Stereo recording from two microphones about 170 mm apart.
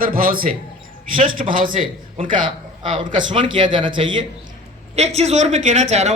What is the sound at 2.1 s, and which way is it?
A man's voice, 30° right (ahead or behind).